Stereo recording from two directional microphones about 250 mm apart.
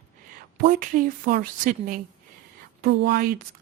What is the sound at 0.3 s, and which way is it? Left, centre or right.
A woman's voice, right.